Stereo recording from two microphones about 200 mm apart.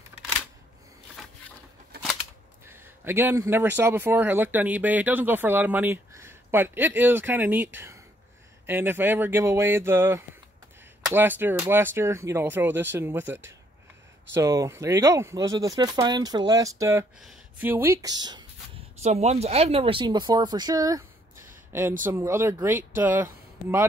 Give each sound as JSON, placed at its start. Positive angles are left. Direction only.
{"t": 2.6, "sound": "speech", "side_deg": -10}
{"t": 17.2, "sound": "speech", "side_deg": -5}
{"t": 19.0, "sound": "speech", "side_deg": -30}
{"t": 22.0, "sound": "speech", "side_deg": -15}